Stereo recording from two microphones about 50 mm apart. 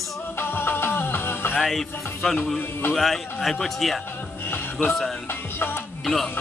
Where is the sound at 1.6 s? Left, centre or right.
Centre.